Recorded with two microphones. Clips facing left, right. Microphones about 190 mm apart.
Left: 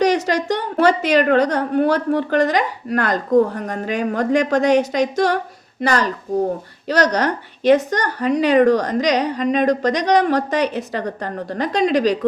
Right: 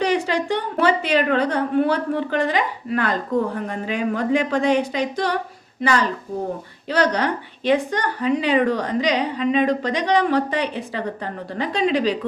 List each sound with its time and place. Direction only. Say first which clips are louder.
0.0 s a woman's voice: left 3 dB; 40° left (ahead or behind)